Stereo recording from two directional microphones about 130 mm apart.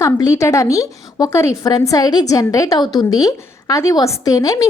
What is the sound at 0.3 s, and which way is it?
A woman's voice, 20° left (ahead or behind).